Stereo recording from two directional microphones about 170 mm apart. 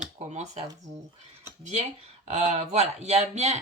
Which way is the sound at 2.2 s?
40° right (ahead or behind).